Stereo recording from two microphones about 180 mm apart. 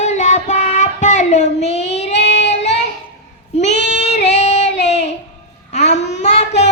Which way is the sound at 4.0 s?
40° left (ahead or behind).